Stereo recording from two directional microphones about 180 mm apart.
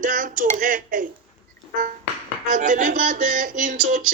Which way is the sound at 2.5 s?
45° right (ahead or behind).